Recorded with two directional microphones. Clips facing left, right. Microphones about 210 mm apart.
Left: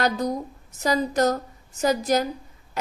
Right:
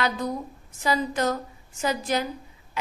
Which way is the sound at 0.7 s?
40° left (ahead or behind).